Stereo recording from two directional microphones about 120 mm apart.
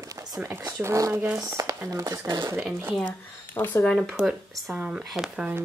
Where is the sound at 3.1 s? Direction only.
15° left (ahead or behind).